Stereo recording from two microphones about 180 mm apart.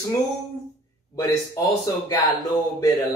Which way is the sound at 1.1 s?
20° left (ahead or behind).